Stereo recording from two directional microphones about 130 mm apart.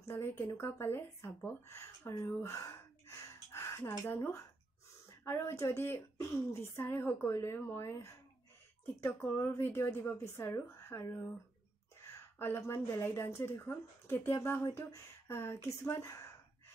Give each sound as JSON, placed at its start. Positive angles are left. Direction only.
{"t": 0.6, "sound": "speech", "side_deg": 20}
{"t": 2.1, "sound": "gasp", "side_deg": 25}
{"t": 5.2, "sound": "speech", "side_deg": 20}
{"t": 12.4, "sound": "speech", "side_deg": 20}